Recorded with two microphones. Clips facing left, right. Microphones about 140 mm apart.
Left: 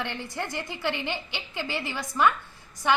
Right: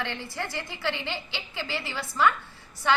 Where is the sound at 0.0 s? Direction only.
15° left (ahead or behind).